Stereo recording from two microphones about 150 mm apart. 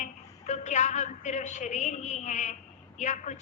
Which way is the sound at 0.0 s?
50° left (ahead or behind).